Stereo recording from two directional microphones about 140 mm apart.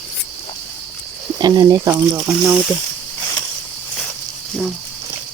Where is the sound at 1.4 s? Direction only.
30° right (ahead or behind).